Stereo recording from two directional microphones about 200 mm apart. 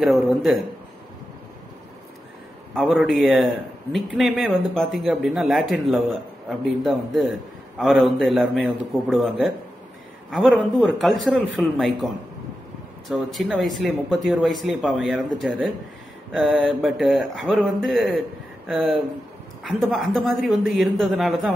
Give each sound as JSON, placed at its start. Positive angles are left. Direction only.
{"t": 0.0, "sound": "a man's voice", "side_deg": 0}
{"t": 2.8, "sound": "a man's voice", "side_deg": 0}
{"t": 13.1, "sound": "a man's voice", "side_deg": 0}